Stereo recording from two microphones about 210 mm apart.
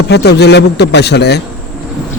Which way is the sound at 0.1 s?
50° left (ahead or behind).